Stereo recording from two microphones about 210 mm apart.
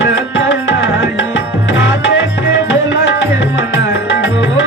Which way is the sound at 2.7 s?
60° left (ahead or behind).